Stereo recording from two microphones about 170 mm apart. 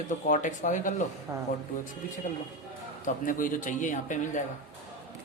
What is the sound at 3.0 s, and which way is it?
Speech, 50° left (ahead or behind).